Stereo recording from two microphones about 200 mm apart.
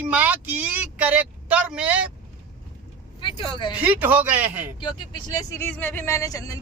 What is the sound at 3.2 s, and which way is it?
Speech, 25° left (ahead or behind).